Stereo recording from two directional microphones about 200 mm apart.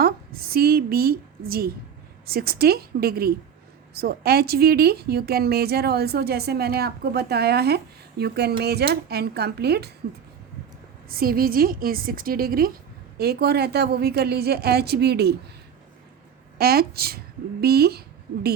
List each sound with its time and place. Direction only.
0.0 s a woman's voice: 50° right (ahead or behind)
11.2 s a woman's voice: 45° right (ahead or behind)
16.6 s a woman's voice: 50° right (ahead or behind)